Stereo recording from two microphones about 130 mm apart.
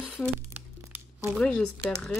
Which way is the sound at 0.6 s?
15° right (ahead or behind).